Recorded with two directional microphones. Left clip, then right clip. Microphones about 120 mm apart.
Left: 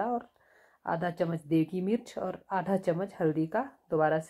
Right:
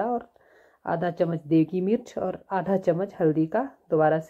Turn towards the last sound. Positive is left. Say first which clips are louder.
# right 6 dB
turn(degrees=-30)  # may be behind; listen again after turning